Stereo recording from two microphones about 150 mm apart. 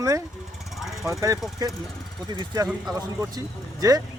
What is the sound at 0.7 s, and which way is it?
Vehicle, centre (ahead or behind).